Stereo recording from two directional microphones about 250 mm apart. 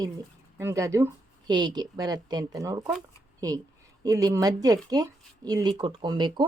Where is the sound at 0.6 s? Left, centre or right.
Centre.